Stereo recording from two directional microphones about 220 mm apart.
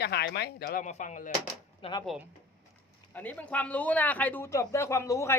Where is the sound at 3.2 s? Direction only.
5° left (ahead or behind).